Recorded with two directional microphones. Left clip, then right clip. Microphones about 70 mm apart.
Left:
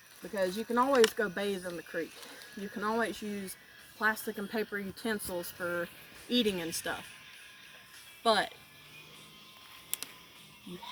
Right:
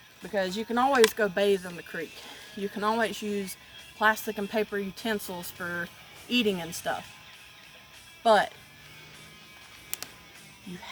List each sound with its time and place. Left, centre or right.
0.3 s speech: right
1.1 s a woman's voice: right
5.6 s speech: right
6.4 s speech: right
8.2 s speech: right